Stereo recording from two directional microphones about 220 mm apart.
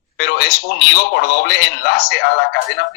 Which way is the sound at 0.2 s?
50° left (ahead or behind).